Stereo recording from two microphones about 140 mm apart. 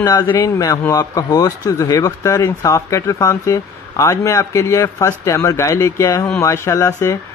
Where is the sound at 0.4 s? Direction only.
20° left (ahead or behind).